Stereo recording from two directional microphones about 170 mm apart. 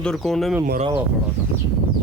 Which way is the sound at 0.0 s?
5° left (ahead or behind).